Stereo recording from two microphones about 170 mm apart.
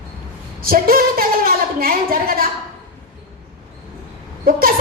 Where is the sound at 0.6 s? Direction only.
60° right (ahead or behind).